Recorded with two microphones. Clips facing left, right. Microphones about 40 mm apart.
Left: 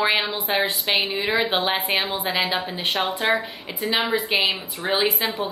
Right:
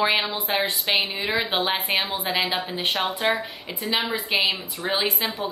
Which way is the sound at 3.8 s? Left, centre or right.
Left.